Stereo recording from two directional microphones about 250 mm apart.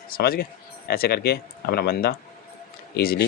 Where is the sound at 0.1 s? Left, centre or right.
Left.